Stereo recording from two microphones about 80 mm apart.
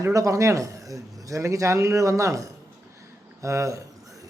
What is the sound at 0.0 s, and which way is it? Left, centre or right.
Speech, right.